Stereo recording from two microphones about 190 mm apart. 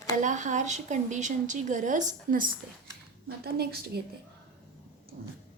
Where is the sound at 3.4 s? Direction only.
55° right (ahead or behind).